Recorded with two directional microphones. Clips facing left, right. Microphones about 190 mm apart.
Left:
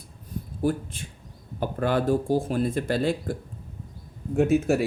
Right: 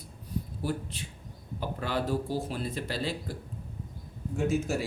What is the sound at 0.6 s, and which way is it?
Speech, 50° left (ahead or behind).